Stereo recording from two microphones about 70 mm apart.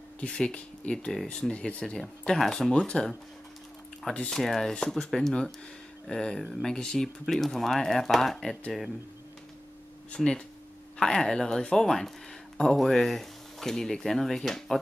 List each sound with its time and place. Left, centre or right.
0.2 s speech: centre
2.0 s speech: centre
4.3 s speech: centre
10.1 s speech: centre